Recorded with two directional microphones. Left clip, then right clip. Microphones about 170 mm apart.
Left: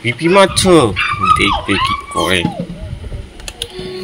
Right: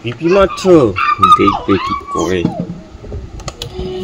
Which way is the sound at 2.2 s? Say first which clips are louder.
Left 2 dB; 5° right (ahead or behind).